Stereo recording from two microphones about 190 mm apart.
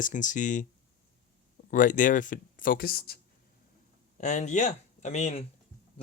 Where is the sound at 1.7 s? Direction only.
45° left (ahead or behind).